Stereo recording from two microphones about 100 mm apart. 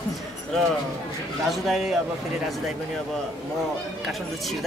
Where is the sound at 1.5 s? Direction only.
Centre (ahead or behind).